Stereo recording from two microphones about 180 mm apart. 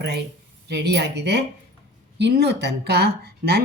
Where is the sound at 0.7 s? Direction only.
70° right (ahead or behind).